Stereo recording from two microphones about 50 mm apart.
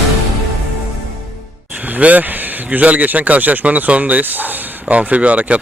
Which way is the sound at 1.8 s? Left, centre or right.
Right.